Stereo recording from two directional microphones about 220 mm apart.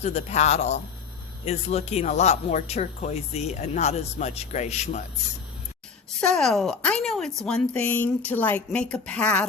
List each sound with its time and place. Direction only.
0.0 s speech: 30° left (ahead or behind)
6.1 s a woman's voice: 5° left (ahead or behind)